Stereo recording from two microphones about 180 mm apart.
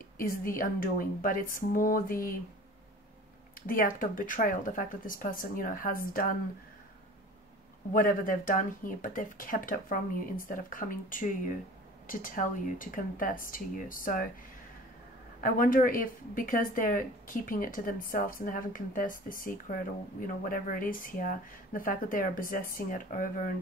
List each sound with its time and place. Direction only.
0.2 s speech: 50° left (ahead or behind)
3.6 s speech: 50° left (ahead or behind)
7.9 s speech: 50° left (ahead or behind)
15.4 s speech: 50° left (ahead or behind)